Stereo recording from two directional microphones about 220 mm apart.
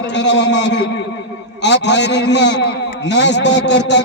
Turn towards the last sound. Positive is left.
turn(degrees=50)  # may be behind; listen again after turning